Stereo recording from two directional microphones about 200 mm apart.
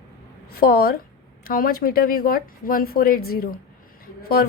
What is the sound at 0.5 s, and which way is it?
A woman's voice, 50° left (ahead or behind).